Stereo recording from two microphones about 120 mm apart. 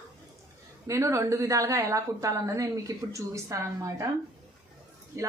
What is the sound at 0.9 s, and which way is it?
A woman's voice, 25° right (ahead or behind).